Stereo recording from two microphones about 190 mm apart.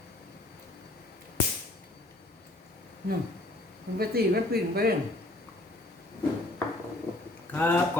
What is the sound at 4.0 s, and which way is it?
Speech, 55° right (ahead or behind).